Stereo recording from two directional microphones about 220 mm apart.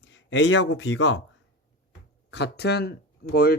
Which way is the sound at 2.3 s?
50° left (ahead or behind).